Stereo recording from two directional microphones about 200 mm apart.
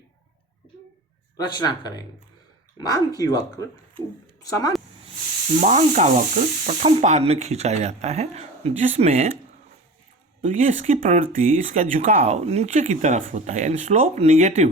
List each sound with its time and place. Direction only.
1.4 s speech: 20° left (ahead or behind)
3.1 s speech: 20° left (ahead or behind)
5.5 s speech: 35° right (ahead or behind)
10.4 s speech: 35° right (ahead or behind)